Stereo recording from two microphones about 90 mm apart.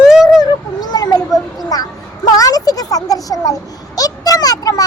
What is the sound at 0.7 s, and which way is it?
A child's voice, 45° left (ahead or behind).